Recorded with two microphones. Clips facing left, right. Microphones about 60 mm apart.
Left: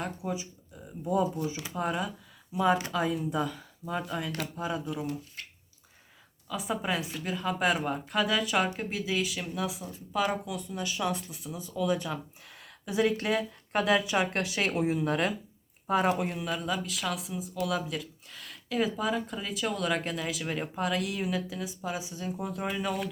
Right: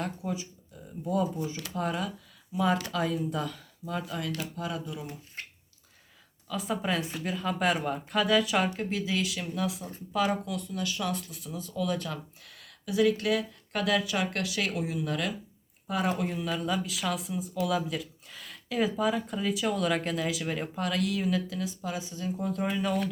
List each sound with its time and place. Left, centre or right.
0.0 s speech: centre
5.4 s a sound: right
6.5 s speech: centre
12.5 s speech: left
16.3 s speech: centre